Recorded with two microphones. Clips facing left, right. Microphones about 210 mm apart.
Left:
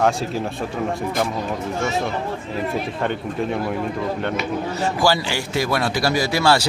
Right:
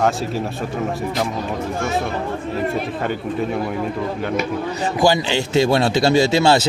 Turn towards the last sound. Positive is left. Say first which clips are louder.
# right 4 dB
turn(degrees=-25)  # may be behind; listen again after turning